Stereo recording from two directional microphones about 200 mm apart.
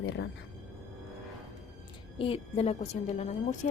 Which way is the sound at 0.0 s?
65° left (ahead or behind).